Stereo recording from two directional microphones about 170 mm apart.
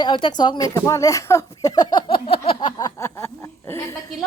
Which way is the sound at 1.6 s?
25° left (ahead or behind).